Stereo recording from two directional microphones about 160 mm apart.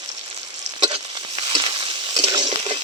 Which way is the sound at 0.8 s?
30° right (ahead or behind).